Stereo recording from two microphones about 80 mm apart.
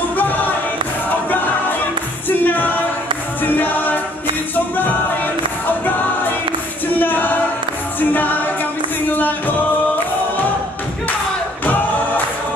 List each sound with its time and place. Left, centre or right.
2.2 s music: left
7.0 s a capella: left
8.1 s music: left